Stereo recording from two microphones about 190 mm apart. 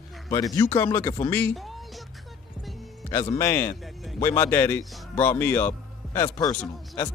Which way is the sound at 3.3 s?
15° left (ahead or behind).